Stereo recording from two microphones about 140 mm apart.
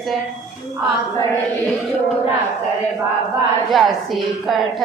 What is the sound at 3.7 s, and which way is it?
Speech, centre (ahead or behind).